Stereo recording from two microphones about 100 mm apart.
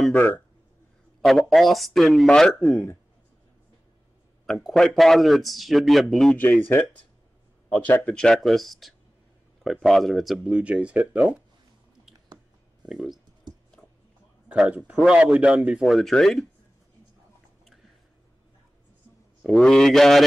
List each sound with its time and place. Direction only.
0.1 s speech: 15° left (ahead or behind)
1.2 s speech: centre (ahead or behind)
4.5 s speech: centre (ahead or behind)
7.7 s speech: 15° left (ahead or behind); by 11.2 s 10° right (ahead or behind)
12.8 s speech: 5° right (ahead or behind)
13.5 s a sound: 45° right (ahead or behind)
14.5 s speech: 10° right (ahead or behind)
19.4 s speech: 5° left (ahead or behind)